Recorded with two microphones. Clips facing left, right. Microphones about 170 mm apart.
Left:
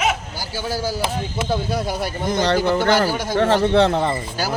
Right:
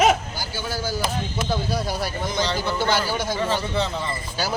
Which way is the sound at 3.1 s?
15° left (ahead or behind).